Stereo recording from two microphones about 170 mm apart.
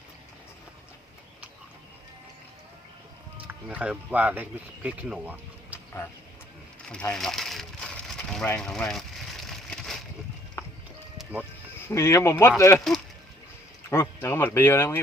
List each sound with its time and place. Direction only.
3.3 s speech: 10° right (ahead or behind)
7.1 s a sound: centre (ahead or behind)
10.6 s music: 15° left (ahead or behind)
11.2 s music: 10° right (ahead or behind)
11.9 s speech: 15° left (ahead or behind)
13.9 s speech: 15° left (ahead or behind)